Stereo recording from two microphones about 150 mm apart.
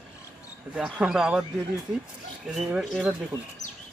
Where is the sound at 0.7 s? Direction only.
5° right (ahead or behind).